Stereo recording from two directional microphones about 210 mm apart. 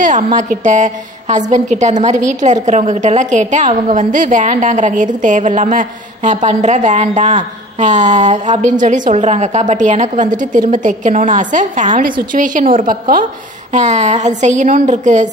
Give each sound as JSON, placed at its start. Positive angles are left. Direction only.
{"t": 0.0, "sound": "a woman's voice", "side_deg": -35}